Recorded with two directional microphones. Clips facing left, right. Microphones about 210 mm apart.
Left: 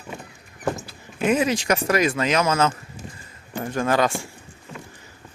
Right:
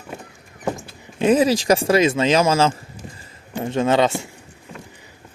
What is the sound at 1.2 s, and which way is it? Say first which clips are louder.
Speech: right 5 dB; 35° right (ahead or behind).